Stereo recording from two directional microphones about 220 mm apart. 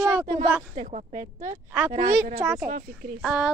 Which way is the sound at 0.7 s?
30° right (ahead or behind).